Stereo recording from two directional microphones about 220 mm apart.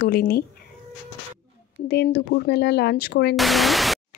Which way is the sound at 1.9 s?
45° left (ahead or behind).